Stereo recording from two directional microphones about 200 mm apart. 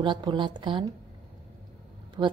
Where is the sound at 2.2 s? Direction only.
25° right (ahead or behind).